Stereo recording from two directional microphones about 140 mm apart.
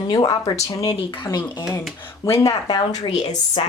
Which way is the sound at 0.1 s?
30° left (ahead or behind).